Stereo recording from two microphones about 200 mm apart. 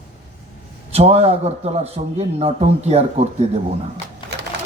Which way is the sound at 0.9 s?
30° right (ahead or behind).